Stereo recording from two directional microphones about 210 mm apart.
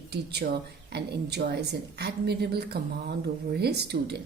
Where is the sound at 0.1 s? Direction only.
50° right (ahead or behind).